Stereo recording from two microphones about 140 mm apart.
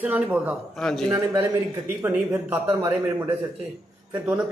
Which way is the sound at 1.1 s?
20° right (ahead or behind).